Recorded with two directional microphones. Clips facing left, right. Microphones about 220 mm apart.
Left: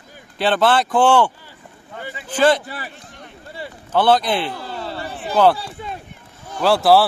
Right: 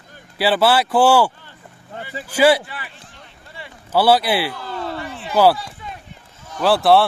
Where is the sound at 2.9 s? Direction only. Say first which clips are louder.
Left 5 dB; 40° left (ahead or behind).